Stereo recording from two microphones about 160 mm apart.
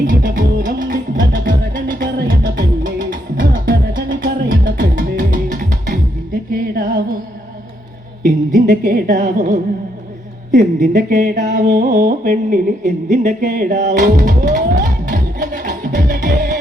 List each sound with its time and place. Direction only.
0.0 s music: 65° right (ahead or behind); by 3.2 s 90° right
3.7 s music: 70° right (ahead or behind)
8.2 s a woman's voice: 55° right (ahead or behind)
10.5 s music: 55° right (ahead or behind)